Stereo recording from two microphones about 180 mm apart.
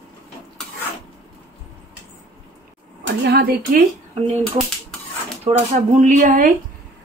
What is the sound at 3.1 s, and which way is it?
Speech, 65° right (ahead or behind).